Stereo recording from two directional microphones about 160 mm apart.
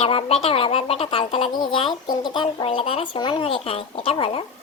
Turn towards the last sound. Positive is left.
turn(degrees=35)  # may be behind; listen again after turning